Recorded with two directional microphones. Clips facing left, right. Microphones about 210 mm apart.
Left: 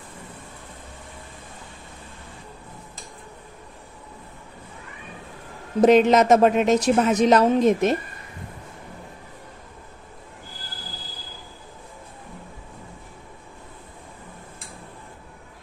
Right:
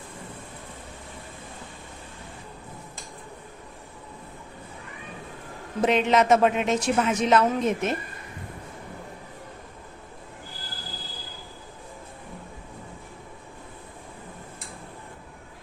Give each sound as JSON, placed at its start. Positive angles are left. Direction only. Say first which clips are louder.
{"t": 5.8, "sound": "a woman's voice", "louder": "left 6 dB", "side_deg": 40}